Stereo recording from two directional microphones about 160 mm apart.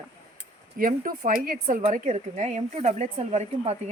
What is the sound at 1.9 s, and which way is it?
A woman's voice, 45° right (ahead or behind).